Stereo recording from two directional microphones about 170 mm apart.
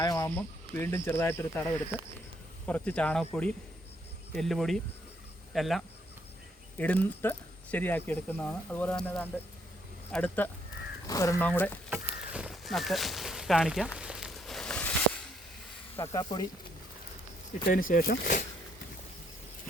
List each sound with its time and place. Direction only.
0.0 s speech: 20° left (ahead or behind)
11.9 s speech: 5° right (ahead or behind)
14.0 s a sound: 5° right (ahead or behind)
16.1 s speech: 20° left (ahead or behind)
17.7 s speech: 55° left (ahead or behind)